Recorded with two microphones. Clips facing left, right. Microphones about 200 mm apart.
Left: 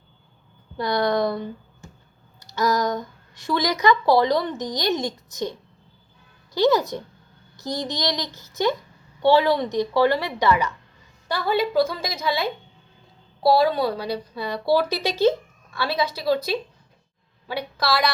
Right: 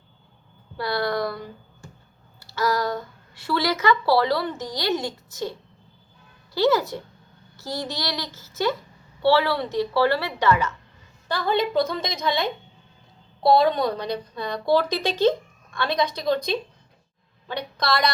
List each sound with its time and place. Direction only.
0.8 s a woman's voice: 20° left (ahead or behind)